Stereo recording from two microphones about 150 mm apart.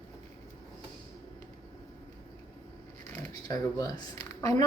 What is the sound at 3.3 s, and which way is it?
Speech, 25° left (ahead or behind).